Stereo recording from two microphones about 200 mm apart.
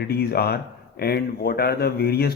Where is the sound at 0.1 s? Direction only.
50° left (ahead or behind).